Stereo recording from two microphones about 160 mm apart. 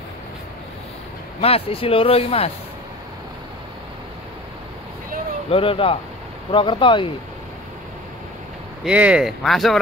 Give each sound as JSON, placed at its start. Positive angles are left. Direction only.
{"t": 1.4, "sound": "speech", "side_deg": 35}
{"t": 5.5, "sound": "speech", "side_deg": 35}
{"t": 8.8, "sound": "speech", "side_deg": -10}